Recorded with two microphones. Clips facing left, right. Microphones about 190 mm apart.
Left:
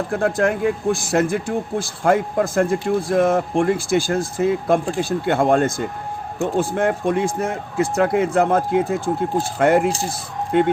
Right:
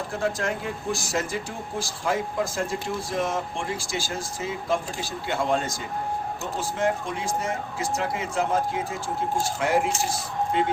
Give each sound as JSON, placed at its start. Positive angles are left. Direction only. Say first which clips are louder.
{"t": 0.1, "sound": "speech", "louder": "left 8 dB", "side_deg": 55}